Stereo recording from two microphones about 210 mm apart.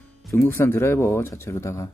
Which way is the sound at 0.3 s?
10° left (ahead or behind).